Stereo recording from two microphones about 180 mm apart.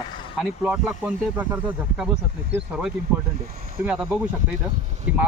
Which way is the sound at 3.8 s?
5° right (ahead or behind).